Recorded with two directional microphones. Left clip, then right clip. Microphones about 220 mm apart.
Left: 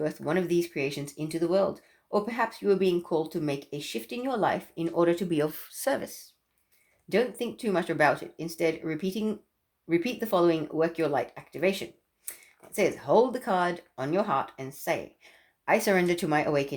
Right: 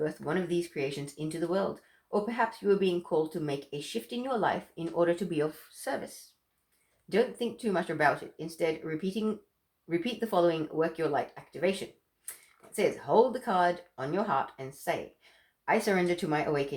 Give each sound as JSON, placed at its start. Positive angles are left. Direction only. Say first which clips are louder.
{"t": 0.0, "sound": "speech", "louder": "left 3 dB", "side_deg": 40}
{"t": 7.1, "sound": "speech", "louder": "left 1 dB", "side_deg": 40}